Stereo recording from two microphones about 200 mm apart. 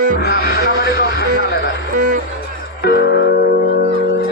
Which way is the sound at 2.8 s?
55° left (ahead or behind).